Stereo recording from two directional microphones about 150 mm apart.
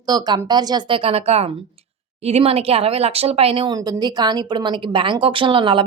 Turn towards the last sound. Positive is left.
turn(degrees=-35)  # may be behind; listen again after turning